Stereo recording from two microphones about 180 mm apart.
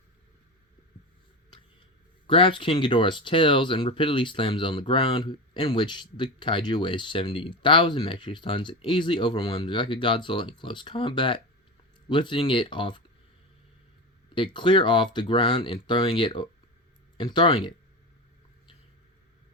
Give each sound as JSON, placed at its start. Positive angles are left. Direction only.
{"t": 2.2, "sound": "speech", "side_deg": 30}
{"t": 14.3, "sound": "speech", "side_deg": 25}